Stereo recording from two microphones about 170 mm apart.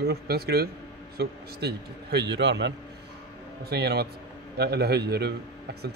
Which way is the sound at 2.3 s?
90° right.